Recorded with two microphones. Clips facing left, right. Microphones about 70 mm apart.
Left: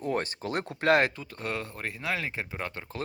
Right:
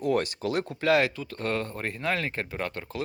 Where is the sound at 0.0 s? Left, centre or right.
Left.